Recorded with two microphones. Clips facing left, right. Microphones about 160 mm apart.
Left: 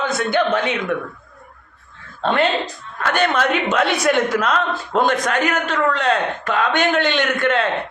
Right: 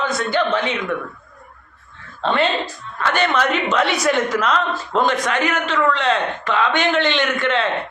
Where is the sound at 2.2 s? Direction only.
45° left (ahead or behind).